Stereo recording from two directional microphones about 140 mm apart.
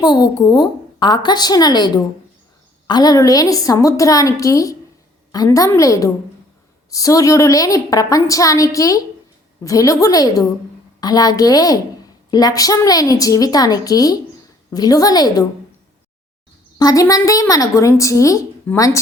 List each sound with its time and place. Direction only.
0.0 s a woman's voice: 30° left (ahead or behind)
16.7 s a woman's voice: 25° left (ahead or behind)